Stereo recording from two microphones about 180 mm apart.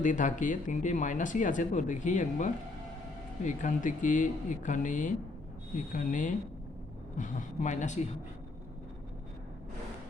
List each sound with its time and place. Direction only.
0.0 s speech: 45° left (ahead or behind)